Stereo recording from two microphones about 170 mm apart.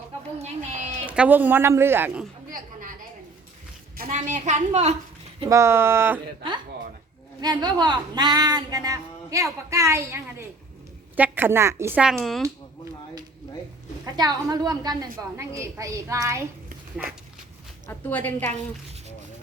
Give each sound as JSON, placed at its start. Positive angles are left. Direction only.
{"t": 0.4, "sound": "a sound", "side_deg": -45}
{"t": 1.0, "sound": "speech", "side_deg": -10}
{"t": 3.9, "sound": "a sound", "side_deg": -60}
{"t": 4.2, "sound": "a woman's voice", "side_deg": -45}
{"t": 5.5, "sound": "speech", "side_deg": -15}
{"t": 7.4, "sound": "a woman's voice", "side_deg": -25}
{"t": 12.1, "sound": "speech", "side_deg": 0}
{"t": 14.0, "sound": "a woman's voice", "side_deg": -25}
{"t": 17.8, "sound": "a woman's voice", "side_deg": 10}